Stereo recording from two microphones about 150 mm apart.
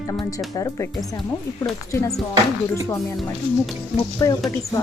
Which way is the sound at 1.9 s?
20° left (ahead or behind).